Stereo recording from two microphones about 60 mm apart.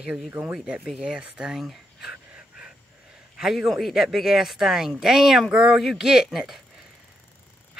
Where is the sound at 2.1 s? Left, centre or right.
Centre.